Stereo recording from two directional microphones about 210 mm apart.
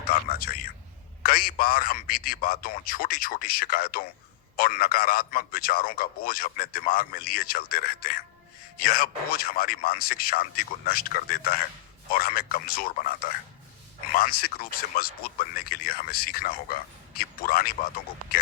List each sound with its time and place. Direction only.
0.0 s a man's voice: 45° left (ahead or behind)
14.1 s a man's voice: 45° left (ahead or behind)